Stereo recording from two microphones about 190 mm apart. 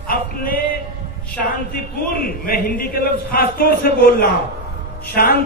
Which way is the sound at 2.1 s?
50° left (ahead or behind).